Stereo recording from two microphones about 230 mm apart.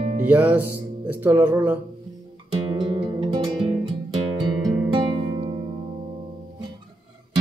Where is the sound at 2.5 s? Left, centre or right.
Right.